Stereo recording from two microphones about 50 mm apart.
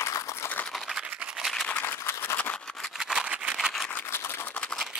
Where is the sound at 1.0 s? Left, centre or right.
Right.